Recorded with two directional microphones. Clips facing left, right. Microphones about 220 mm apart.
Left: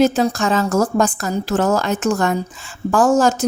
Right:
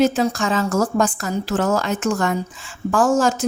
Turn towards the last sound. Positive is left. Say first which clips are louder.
# left 3 dB
turn(degrees=40)  # may be behind; listen again after turning